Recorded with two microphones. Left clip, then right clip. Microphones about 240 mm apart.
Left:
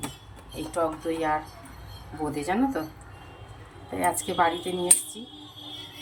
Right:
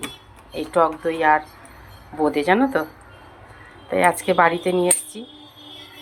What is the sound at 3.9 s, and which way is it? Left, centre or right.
Speech, right.